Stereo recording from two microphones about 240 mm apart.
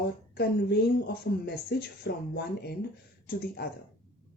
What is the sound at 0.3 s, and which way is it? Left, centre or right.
Speech, left.